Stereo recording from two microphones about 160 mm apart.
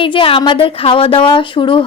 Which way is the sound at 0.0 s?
35° left (ahead or behind).